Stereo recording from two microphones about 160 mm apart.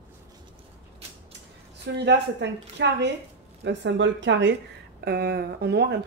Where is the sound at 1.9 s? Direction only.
90° right.